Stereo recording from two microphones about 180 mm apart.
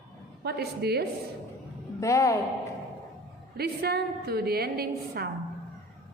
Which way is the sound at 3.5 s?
60° right (ahead or behind).